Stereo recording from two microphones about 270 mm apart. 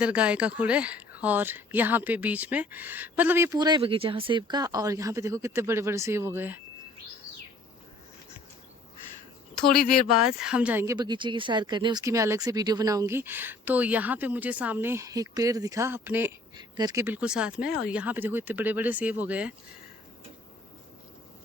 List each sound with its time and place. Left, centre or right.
0.0 s speech: centre
9.6 s speech: left
10.1 s speech: centre